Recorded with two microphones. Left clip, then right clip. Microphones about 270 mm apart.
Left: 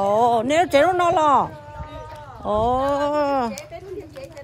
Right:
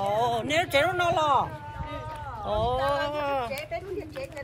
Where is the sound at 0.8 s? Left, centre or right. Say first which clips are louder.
Left 7 dB; left.